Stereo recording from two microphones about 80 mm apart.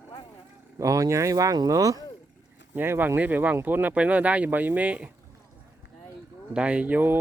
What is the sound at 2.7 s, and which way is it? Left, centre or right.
Speech, right.